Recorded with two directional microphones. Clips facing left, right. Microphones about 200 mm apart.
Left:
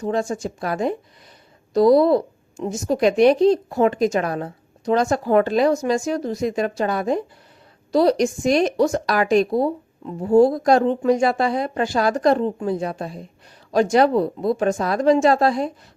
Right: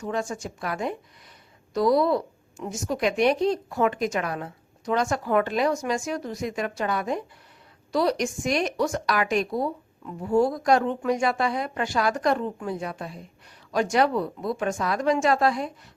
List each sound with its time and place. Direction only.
0.0 s a woman's voice: 30° left (ahead or behind)